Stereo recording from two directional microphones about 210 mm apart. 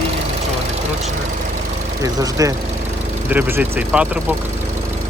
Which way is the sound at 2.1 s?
15° right (ahead or behind).